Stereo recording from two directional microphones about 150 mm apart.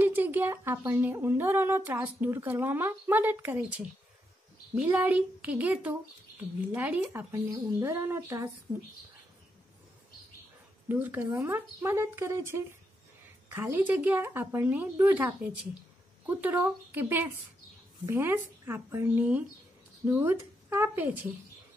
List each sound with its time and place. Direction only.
0.0 s speech: 10° right (ahead or behind)
10.9 s speech: 10° right (ahead or behind)